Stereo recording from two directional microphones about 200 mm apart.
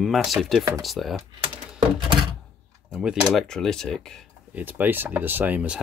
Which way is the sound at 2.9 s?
5° right (ahead or behind).